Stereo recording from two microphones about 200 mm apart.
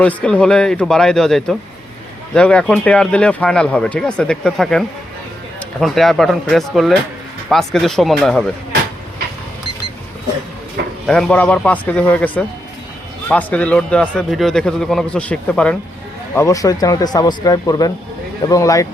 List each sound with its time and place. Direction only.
0.0 s speech: 5° left (ahead or behind)
11.0 s speech: 5° left (ahead or behind)